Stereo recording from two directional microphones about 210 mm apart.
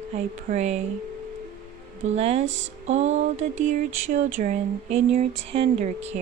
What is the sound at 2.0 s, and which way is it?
Speech, 30° right (ahead or behind).